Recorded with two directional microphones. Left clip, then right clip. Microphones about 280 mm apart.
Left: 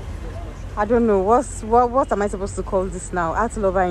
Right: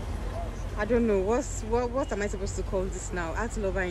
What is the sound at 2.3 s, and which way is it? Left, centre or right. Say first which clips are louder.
Speech: left 8 dB; right.